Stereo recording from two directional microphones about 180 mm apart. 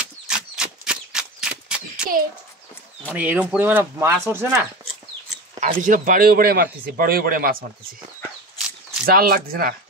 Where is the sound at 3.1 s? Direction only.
10° right (ahead or behind).